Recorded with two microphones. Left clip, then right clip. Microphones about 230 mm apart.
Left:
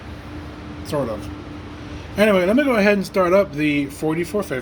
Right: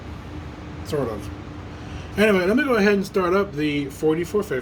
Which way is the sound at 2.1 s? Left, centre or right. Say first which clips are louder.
Left 3 dB; centre.